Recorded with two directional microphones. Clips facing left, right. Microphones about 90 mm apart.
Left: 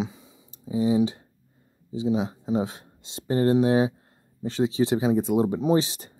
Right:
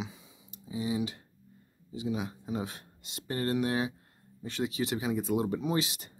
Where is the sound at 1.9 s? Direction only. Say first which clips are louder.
Left 9 dB; 25° left (ahead or behind).